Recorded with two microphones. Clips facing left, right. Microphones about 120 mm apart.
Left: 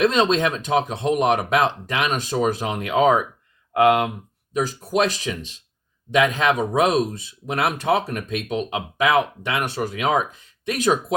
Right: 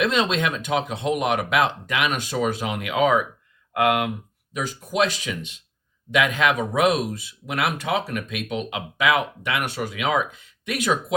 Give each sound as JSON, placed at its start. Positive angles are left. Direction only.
{"t": 0.0, "sound": "speech", "side_deg": 35}